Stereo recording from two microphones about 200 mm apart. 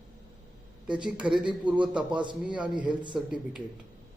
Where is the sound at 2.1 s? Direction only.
25° right (ahead or behind).